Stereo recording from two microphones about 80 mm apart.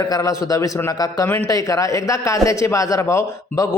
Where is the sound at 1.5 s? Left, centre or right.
Left.